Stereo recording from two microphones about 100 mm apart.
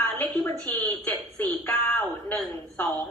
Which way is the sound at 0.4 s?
15° left (ahead or behind).